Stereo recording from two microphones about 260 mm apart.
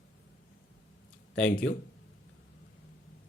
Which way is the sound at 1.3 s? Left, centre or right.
Centre.